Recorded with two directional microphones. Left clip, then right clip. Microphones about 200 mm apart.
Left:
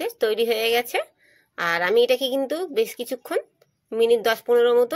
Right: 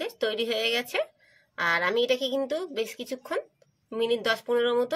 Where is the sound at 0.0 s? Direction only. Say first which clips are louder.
Left 6 dB; 35° left (ahead or behind).